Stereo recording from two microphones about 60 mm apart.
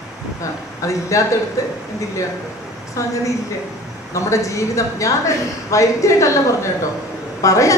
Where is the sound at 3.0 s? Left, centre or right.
Left.